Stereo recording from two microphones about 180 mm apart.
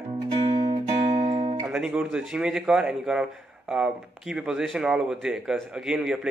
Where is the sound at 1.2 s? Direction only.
35° right (ahead or behind).